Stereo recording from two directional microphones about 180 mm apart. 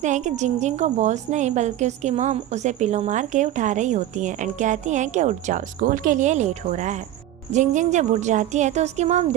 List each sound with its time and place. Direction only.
0.0 s a woman's voice: 40° right (ahead or behind)